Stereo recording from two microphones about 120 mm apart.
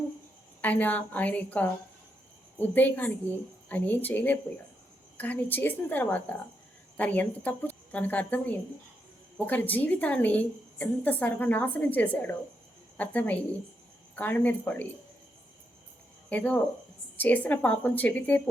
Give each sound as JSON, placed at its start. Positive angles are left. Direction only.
{"t": 0.6, "sound": "a woman's voice", "side_deg": 15}
{"t": 16.3, "sound": "a woman's voice", "side_deg": 10}